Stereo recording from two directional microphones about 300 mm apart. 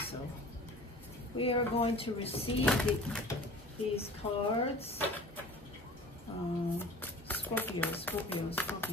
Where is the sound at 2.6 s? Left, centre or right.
Centre.